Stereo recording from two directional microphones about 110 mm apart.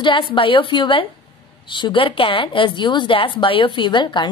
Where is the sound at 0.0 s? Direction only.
45° left (ahead or behind).